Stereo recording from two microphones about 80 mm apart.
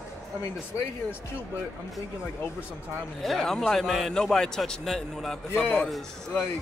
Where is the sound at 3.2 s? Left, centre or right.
Centre.